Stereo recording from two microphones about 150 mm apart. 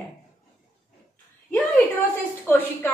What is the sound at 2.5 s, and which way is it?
Speech, 15° left (ahead or behind).